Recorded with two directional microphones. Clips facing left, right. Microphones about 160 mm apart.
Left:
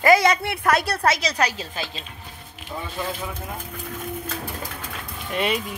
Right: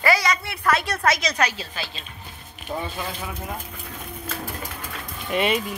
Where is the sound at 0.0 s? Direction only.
50° left (ahead or behind).